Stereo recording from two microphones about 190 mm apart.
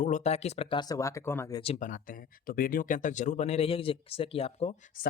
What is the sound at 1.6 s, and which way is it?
Speech, 35° left (ahead or behind).